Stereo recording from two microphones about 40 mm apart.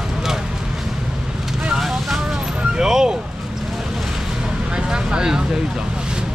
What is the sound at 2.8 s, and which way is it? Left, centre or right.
Vehicle, centre.